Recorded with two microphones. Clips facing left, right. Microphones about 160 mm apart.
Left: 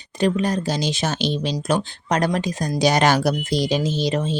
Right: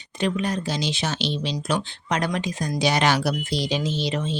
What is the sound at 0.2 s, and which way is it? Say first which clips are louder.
Speech: left 4 dB; 40° left (ahead or behind).